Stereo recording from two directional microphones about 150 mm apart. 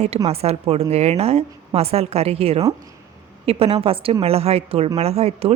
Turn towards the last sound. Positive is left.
turn(degrees=-45)  # may be behind; listen again after turning